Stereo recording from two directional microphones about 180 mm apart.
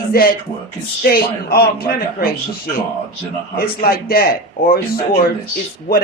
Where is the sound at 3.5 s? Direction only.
55° left (ahead or behind).